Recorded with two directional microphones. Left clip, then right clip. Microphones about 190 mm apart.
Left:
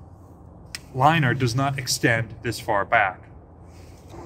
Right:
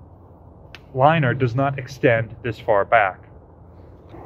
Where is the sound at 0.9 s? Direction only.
30° right (ahead or behind).